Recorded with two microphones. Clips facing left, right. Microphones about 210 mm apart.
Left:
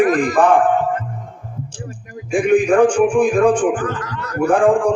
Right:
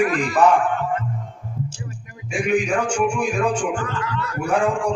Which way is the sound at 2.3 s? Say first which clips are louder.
Left 7 dB; 55° left (ahead or behind).